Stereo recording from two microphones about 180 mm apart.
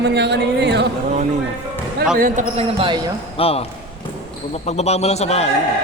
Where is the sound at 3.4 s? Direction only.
35° left (ahead or behind).